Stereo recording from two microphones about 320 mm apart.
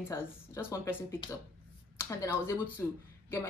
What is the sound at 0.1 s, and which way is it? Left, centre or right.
Speech, centre.